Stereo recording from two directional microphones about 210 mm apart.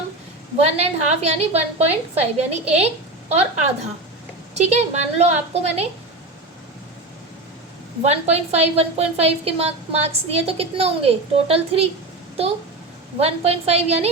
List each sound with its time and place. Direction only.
0.6 s a woman's voice: 30° right (ahead or behind)
8.0 s a woman's voice: 30° right (ahead or behind)
13.1 s a woman's voice: 30° right (ahead or behind)